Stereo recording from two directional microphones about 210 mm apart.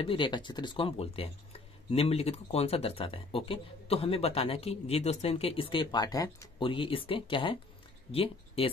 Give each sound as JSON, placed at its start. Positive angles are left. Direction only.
{"t": 0.0, "sound": "speech", "side_deg": 25}